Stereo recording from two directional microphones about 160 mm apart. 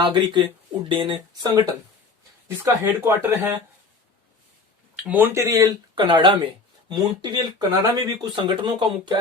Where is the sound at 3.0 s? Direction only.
15° right (ahead or behind).